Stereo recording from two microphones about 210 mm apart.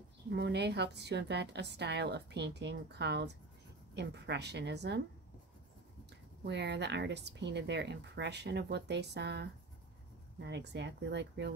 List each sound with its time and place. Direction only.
0.3 s speech: 55° right (ahead or behind)
6.4 s speech: 55° right (ahead or behind)